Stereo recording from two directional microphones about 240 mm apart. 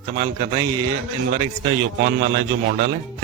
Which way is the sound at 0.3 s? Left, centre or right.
Centre.